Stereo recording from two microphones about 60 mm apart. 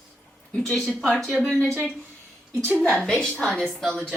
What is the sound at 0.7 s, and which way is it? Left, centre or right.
Speech, centre.